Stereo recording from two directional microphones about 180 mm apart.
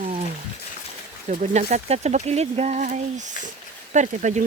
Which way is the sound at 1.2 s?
40° right (ahead or behind).